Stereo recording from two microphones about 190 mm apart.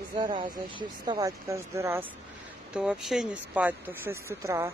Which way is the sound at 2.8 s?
5° right (ahead or behind).